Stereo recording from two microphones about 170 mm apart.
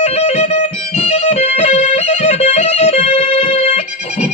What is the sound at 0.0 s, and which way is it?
Music, 40° left (ahead or behind).